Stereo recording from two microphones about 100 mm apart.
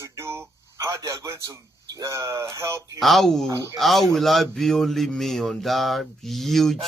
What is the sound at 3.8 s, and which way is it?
Speech, centre (ahead or behind).